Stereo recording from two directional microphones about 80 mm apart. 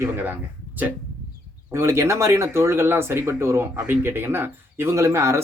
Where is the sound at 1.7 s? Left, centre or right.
Right.